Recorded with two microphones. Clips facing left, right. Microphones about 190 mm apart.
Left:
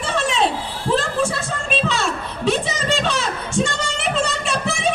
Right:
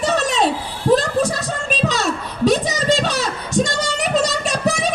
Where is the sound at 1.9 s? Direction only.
40° right (ahead or behind).